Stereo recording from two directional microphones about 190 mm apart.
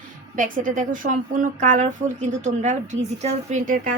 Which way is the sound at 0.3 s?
45° right (ahead or behind).